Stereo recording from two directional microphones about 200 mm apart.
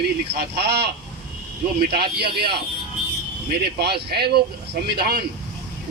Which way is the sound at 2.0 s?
55° right (ahead or behind).